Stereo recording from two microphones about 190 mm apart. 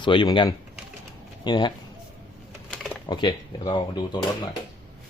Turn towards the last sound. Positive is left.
turn(degrees=25)  # may be behind; listen again after turning